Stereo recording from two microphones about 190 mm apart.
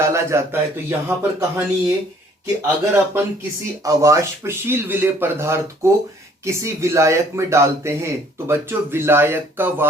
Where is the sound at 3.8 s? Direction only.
15° right (ahead or behind).